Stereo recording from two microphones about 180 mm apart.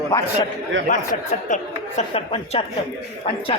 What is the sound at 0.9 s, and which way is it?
A woman's voice, 45° left (ahead or behind).